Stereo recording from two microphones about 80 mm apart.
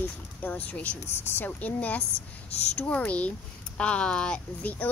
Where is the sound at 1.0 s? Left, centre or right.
Left.